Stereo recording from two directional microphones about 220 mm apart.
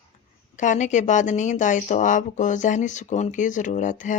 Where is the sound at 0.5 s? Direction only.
35° left (ahead or behind).